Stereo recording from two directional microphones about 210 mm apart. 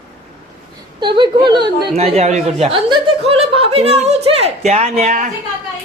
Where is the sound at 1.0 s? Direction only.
20° right (ahead or behind).